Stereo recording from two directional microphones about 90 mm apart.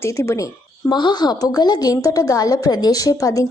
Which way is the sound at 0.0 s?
30° left (ahead or behind).